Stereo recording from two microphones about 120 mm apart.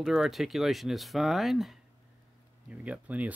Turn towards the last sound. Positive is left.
turn(degrees=-10)  # may be behind; listen again after turning